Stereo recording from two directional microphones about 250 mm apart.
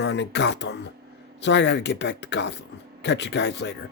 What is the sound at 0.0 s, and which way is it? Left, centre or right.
Speech, left.